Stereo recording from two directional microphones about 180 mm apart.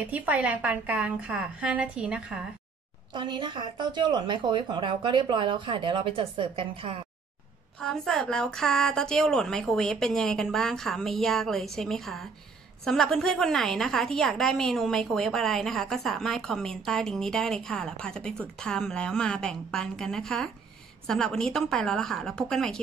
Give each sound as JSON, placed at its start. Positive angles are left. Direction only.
{"t": 0.0, "sound": "a woman's voice", "side_deg": -10}
{"t": 3.1, "sound": "speech", "side_deg": -25}
{"t": 7.8, "sound": "a woman's voice", "side_deg": 5}